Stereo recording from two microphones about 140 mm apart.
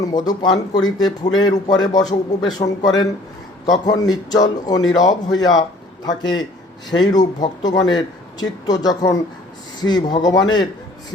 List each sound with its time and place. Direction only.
0.0 s a man's voice: 30° left (ahead or behind)